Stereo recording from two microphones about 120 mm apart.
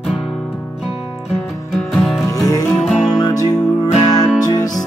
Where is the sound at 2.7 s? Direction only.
Centre (ahead or behind).